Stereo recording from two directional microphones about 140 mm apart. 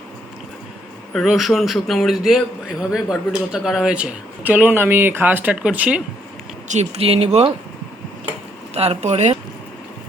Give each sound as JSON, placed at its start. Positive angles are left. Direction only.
{"t": 1.1, "sound": "a man's voice", "side_deg": 0}
{"t": 6.7, "sound": "speech", "side_deg": -50}
{"t": 8.7, "sound": "speech", "side_deg": -45}